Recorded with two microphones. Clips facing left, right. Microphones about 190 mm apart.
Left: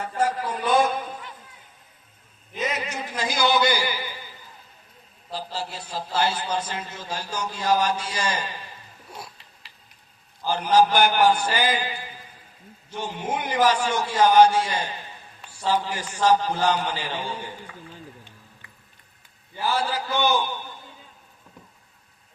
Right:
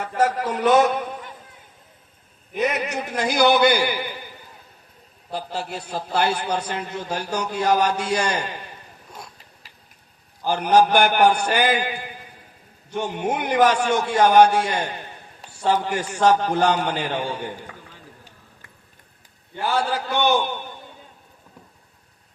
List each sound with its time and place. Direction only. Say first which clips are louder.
0.1 s a man's voice: right 4 dB; 75° right (ahead or behind)
2.5 s a man's voice: right 5 dB; 60° right (ahead or behind)
9.1 s a sound: left 1 dB; 5° left (ahead or behind)
10.4 s a man's voice: right 2 dB; 60° right (ahead or behind)
19.5 s a man's voice: right 2 dB; 60° right (ahead or behind)